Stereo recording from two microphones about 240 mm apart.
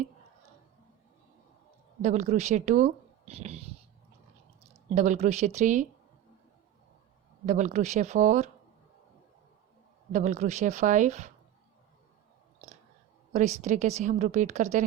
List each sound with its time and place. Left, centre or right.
2.0 s speech: right
4.9 s a woman's voice: right
7.4 s a woman's voice: right
10.1 s a woman's voice: right
13.3 s a woman's voice: right